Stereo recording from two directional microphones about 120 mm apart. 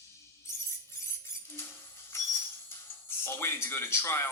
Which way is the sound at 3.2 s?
20° left (ahead or behind).